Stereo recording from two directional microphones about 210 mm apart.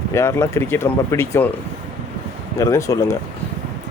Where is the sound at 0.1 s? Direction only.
15° left (ahead or behind).